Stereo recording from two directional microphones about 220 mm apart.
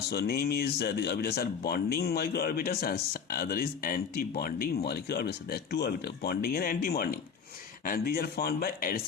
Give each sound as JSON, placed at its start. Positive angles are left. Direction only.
{"t": 0.1, "sound": "speech", "side_deg": 45}